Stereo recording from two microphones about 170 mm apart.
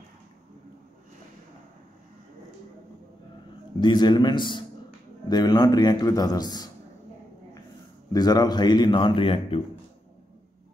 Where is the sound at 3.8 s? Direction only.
25° left (ahead or behind).